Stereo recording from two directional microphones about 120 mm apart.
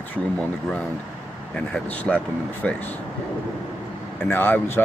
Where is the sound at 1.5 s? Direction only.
10° left (ahead or behind).